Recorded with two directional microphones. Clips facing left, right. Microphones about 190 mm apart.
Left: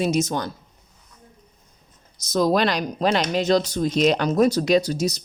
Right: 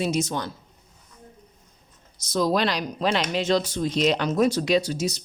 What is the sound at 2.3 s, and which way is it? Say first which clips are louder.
Speech: left 3 dB; 50° left (ahead or behind).